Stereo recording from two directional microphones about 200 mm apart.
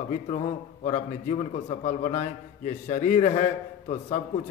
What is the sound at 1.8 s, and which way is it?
A man's voice, 35° left (ahead or behind).